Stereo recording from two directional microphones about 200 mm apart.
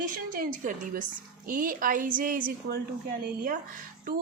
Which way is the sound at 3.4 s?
40° right (ahead or behind).